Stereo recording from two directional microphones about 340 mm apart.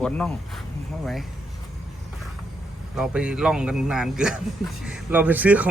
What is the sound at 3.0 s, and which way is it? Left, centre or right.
Speech, centre.